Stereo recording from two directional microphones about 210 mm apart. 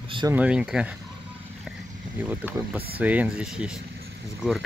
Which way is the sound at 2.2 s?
10° right (ahead or behind).